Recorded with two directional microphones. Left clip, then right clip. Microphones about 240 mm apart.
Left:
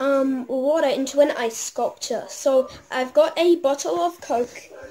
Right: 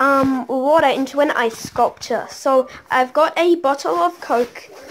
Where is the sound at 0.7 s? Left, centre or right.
Centre.